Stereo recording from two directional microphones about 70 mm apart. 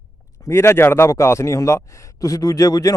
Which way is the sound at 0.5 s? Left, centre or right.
Left.